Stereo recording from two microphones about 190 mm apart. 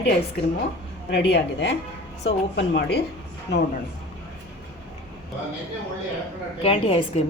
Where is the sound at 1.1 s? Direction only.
65° left (ahead or behind).